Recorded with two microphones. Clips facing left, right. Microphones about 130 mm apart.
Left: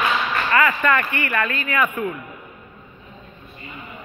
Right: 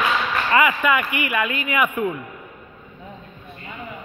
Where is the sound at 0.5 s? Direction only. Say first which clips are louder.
Even; 10° right (ahead or behind).